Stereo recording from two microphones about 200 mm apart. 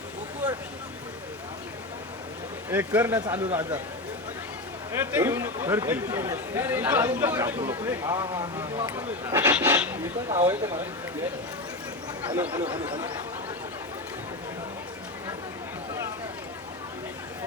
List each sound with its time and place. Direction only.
0.4 s a sound: 10° right (ahead or behind)
2.6 s a man's voice: 10° right (ahead or behind)
4.9 s a man's voice: 10° right (ahead or behind)
10.2 s speech: 20° right (ahead or behind)
12.4 s a man's voice: 10° right (ahead or behind)
12.6 s speech: 25° right (ahead or behind)